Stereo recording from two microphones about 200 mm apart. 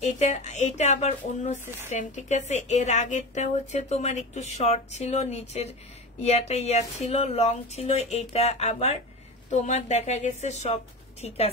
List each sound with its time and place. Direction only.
0.0 s a woman's voice: 35° left (ahead or behind)